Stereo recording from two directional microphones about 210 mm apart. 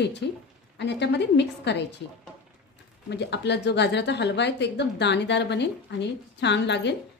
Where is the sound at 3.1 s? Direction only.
55° left (ahead or behind).